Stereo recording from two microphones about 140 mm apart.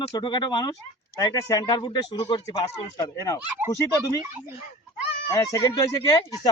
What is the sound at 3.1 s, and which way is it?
Speech, 25° left (ahead or behind).